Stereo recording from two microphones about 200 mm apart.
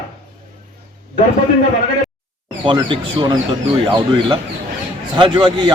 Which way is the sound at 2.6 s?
25° right (ahead or behind).